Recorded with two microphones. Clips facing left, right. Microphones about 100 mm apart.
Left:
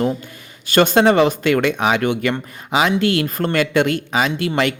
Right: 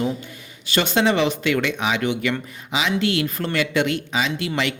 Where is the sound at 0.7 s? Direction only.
50° left (ahead or behind).